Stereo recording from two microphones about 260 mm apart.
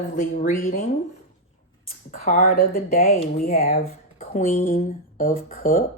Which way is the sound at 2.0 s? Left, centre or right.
Left.